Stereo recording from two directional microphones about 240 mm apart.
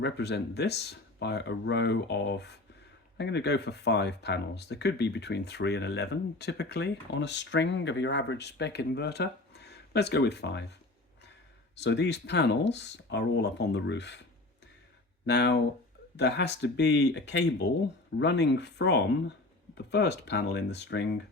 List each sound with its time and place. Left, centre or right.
0.0 s speech: left
11.8 s speech: left
15.3 s speech: left